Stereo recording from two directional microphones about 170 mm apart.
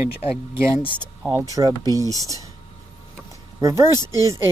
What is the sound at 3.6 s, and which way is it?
Speech, 20° right (ahead or behind).